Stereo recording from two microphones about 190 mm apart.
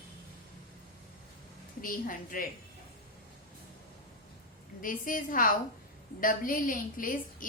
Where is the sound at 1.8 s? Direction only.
45° left (ahead or behind).